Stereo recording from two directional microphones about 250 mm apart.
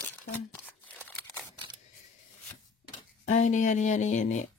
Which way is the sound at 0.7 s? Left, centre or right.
Centre.